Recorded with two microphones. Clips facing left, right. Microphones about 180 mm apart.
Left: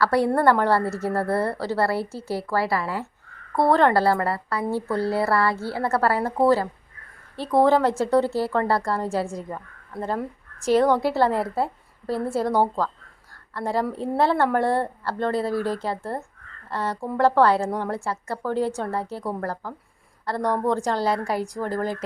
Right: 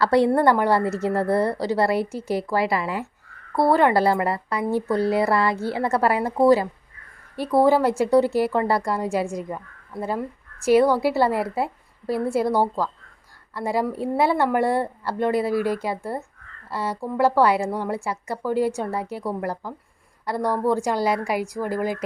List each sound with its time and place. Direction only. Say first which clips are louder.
0.0 s a woman's voice: right 2 dB; 20° right (ahead or behind)